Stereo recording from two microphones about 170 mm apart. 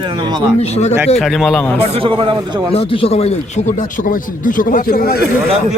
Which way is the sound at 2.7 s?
35° left (ahead or behind).